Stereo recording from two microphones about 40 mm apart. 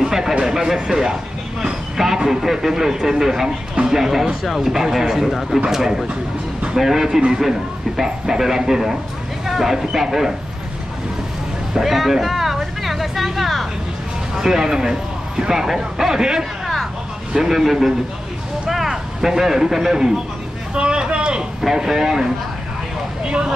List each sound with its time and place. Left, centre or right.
0.0 s a sound: centre
1.6 s speech: centre
11.7 s a sound: centre
14.3 s speech: centre
20.7 s speech: right
21.6 s speech: centre